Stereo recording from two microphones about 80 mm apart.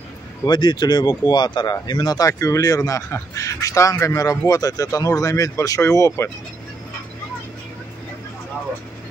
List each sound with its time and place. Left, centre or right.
0.5 s speech: left